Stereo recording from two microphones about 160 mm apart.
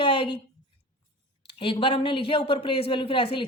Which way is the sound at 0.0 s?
35° left (ahead or behind).